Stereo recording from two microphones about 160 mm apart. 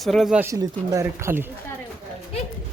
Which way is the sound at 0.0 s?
Centre (ahead or behind).